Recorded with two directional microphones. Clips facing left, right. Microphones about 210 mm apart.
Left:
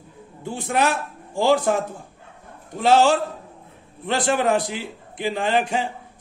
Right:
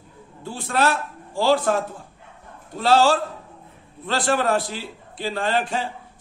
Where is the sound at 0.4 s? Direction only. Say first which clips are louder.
Left 1 dB; 15° left (ahead or behind).